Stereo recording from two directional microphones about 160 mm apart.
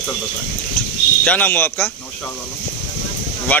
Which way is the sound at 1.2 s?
10° left (ahead or behind).